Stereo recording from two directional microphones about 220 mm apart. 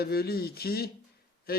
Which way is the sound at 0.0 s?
45° left (ahead or behind).